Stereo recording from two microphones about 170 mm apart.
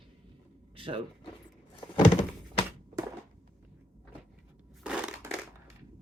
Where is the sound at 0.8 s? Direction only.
30° right (ahead or behind).